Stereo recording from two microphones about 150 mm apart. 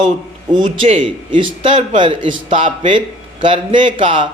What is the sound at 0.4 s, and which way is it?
Speech, 30° right (ahead or behind).